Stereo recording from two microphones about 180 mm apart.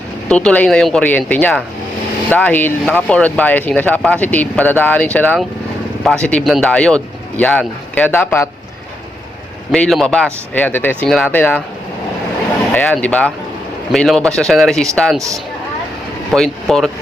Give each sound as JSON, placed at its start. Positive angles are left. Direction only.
{"t": 0.3, "sound": "speech", "side_deg": 5}
{"t": 9.7, "sound": "speech", "side_deg": 5}
{"t": 12.7, "sound": "speech", "side_deg": 5}
{"t": 16.3, "sound": "speech", "side_deg": 0}